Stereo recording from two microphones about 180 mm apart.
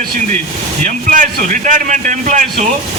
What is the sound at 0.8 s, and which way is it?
A man's voice, 45° right (ahead or behind).